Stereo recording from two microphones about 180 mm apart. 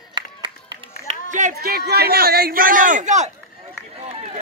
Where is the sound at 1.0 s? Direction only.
45° right (ahead or behind).